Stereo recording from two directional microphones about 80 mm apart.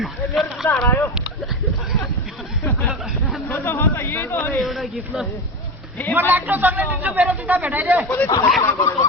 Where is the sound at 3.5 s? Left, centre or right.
Left.